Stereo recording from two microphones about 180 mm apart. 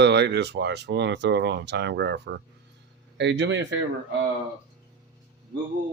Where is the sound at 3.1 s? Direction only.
85° right.